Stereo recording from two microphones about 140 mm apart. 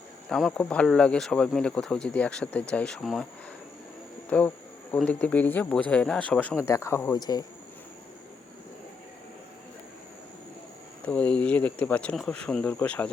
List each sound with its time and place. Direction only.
0.3 s speech: centre (ahead or behind)
4.3 s insect: 15° left (ahead or behind)
4.9 s speech: 10° left (ahead or behind)
6.6 s speech: 20° left (ahead or behind)
11.0 s speech: 10° left (ahead or behind)